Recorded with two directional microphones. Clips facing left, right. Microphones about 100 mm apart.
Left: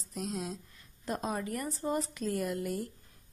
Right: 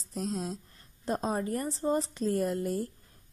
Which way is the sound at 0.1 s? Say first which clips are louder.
Right 3 dB; 35° right (ahead or behind).